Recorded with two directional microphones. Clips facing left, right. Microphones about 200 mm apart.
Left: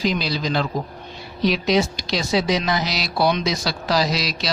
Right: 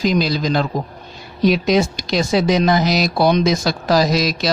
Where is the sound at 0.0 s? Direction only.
45° right (ahead or behind).